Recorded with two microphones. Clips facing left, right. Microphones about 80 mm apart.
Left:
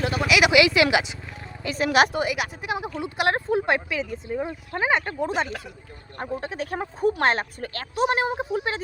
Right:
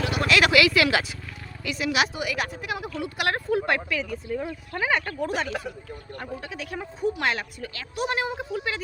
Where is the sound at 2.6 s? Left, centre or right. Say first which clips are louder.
Left 2 dB; left.